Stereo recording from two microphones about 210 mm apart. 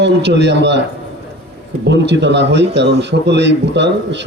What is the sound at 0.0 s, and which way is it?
Speech, 55° right (ahead or behind).